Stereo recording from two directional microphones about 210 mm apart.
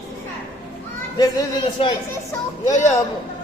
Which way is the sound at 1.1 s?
20° left (ahead or behind).